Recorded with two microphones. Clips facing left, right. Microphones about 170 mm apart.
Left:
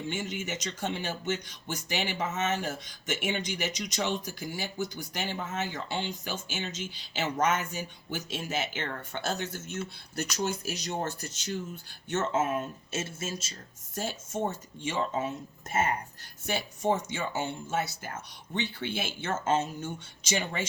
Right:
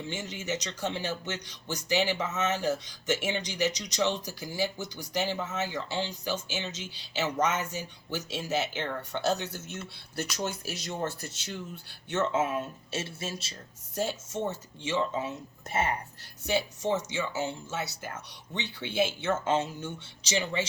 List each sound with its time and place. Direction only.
0.1 s speech: 55° left (ahead or behind)